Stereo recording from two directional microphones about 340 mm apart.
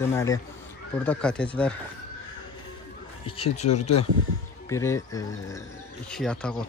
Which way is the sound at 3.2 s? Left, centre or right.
Centre.